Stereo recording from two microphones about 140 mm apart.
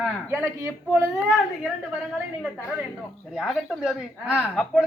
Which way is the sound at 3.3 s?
Centre (ahead or behind).